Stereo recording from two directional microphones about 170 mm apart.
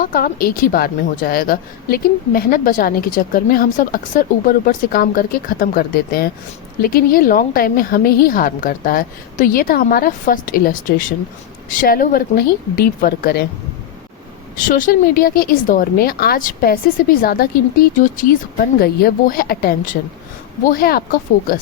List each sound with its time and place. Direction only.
0.0 s a woman's voice: 55° left (ahead or behind)
14.6 s a woman's voice: 55° left (ahead or behind)